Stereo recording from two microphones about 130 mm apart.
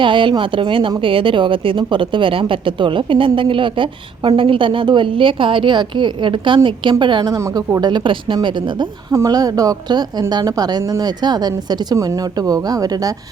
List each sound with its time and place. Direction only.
0.0 s a woman's voice: 40° right (ahead or behind)